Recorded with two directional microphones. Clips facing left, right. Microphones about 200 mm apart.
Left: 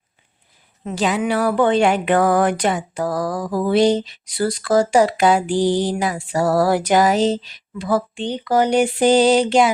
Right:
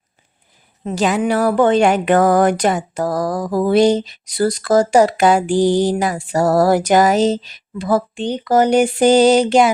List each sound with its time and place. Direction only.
0.9 s speech: 45° right (ahead or behind)